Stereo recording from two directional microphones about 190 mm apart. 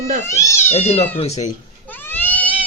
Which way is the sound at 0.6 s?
35° left (ahead or behind).